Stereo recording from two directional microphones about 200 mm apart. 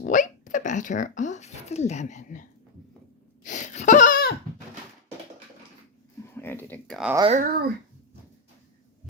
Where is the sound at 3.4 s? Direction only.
40° left (ahead or behind).